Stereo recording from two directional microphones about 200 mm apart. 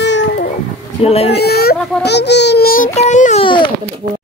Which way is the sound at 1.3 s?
50° left (ahead or behind).